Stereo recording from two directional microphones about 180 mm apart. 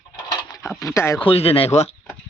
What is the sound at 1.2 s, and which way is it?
Speech, 30° left (ahead or behind).